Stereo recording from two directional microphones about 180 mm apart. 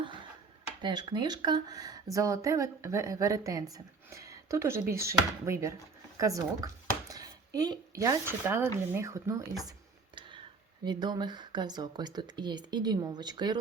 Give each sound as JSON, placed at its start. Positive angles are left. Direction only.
{"t": 0.8, "sound": "speech", "side_deg": -25}
{"t": 10.8, "sound": "speech", "side_deg": -25}